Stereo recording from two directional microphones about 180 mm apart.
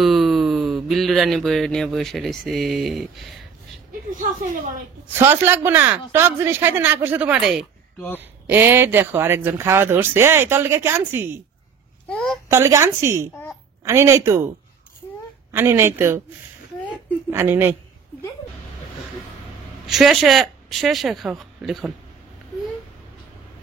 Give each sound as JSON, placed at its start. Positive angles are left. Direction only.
{"t": 0.0, "sound": "speech", "side_deg": 0}
{"t": 4.2, "sound": "a woman's voice", "side_deg": -45}
{"t": 5.2, "sound": "speech", "side_deg": -10}
{"t": 12.1, "sound": "speech", "side_deg": 5}
{"t": 12.4, "sound": "speech", "side_deg": -15}
{"t": 15.5, "sound": "speech", "side_deg": -15}
{"t": 17.3, "sound": "speech", "side_deg": -15}
{"t": 19.9, "sound": "speech", "side_deg": 0}